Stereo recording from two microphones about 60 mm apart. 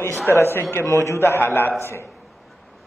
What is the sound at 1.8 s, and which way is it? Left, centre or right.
Speech, left.